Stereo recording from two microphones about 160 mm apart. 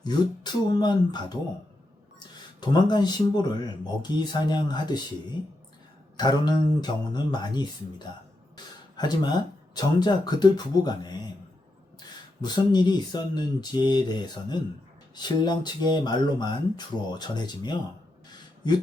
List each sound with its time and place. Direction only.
0.0 s speech: 25° left (ahead or behind)
2.6 s speech: 25° left (ahead or behind)
6.1 s speech: 25° left (ahead or behind)
8.5 s a sound: 25° left (ahead or behind)
9.7 s speech: 25° left (ahead or behind)